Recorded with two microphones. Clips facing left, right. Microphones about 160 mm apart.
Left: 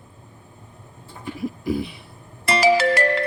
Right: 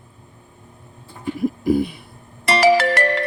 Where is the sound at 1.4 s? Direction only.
50° right (ahead or behind).